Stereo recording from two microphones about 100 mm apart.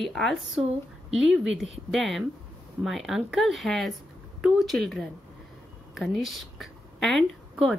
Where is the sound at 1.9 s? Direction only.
Centre (ahead or behind).